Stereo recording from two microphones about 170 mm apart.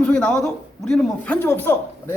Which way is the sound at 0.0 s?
5° left (ahead or behind).